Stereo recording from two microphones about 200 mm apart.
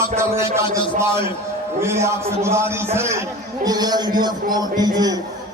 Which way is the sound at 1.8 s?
15° right (ahead or behind).